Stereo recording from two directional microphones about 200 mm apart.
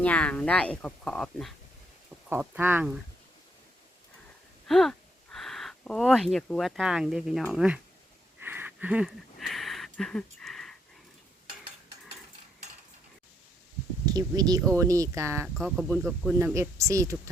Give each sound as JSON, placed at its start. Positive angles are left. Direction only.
{"t": 0.0, "sound": "speech", "side_deg": 5}
{"t": 2.3, "sound": "speech", "side_deg": -10}
{"t": 4.7, "sound": "speech", "side_deg": 0}
{"t": 8.4, "sound": "a sound", "side_deg": -10}
{"t": 14.0, "sound": "speech", "side_deg": -20}
{"t": 15.5, "sound": "speech", "side_deg": 0}
{"t": 16.6, "sound": "speech", "side_deg": -15}